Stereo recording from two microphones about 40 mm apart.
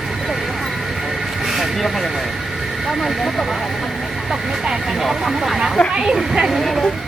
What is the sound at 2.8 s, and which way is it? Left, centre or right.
Speech, centre.